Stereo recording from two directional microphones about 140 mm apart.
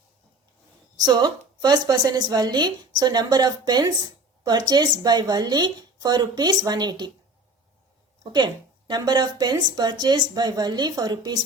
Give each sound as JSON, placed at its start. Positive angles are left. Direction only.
{"t": 0.9, "sound": "a woman's voice", "side_deg": -30}
{"t": 8.2, "sound": "a woman's voice", "side_deg": -30}